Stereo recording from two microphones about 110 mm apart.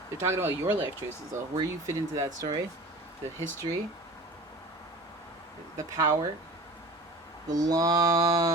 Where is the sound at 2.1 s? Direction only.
30° right (ahead or behind).